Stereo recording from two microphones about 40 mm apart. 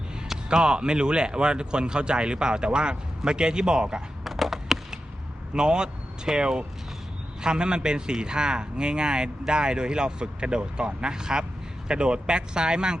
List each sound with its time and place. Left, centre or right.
0.4 s speech: right
4.2 s a sound: centre
5.5 s speech: right